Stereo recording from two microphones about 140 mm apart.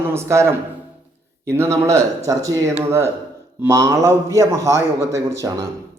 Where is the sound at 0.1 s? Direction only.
20° right (ahead or behind).